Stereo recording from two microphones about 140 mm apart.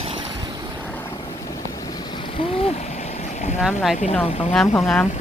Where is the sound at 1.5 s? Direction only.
30° left (ahead or behind); by 3.6 s 55° left (ahead or behind).